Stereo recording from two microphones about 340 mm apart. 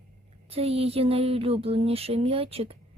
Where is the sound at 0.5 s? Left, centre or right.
Centre.